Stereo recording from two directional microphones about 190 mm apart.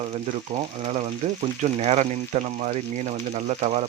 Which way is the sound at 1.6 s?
35° right (ahead or behind).